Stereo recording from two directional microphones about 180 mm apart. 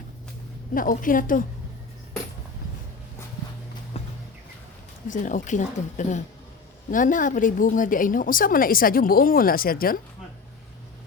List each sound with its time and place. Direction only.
0.7 s a woman's voice: 50° left (ahead or behind)
3.9 s a sound: 35° left (ahead or behind)
5.0 s a woman's voice: 45° left (ahead or behind)